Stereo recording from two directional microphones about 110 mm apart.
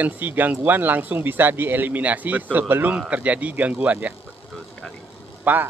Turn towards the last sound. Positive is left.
turn(degrees=-15)  # may be behind; listen again after turning